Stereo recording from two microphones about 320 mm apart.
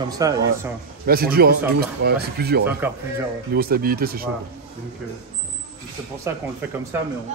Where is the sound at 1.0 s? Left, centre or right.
Right.